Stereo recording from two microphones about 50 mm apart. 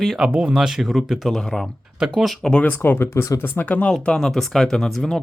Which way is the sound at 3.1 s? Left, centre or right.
Left.